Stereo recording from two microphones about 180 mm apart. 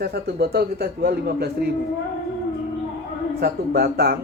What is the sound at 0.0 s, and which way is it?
A man's voice, 60° right (ahead or behind).